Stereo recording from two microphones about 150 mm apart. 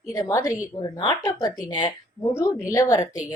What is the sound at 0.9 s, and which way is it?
Speech, 30° left (ahead or behind).